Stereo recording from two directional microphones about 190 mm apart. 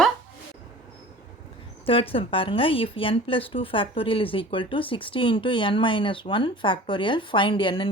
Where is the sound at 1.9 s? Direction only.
30° left (ahead or behind).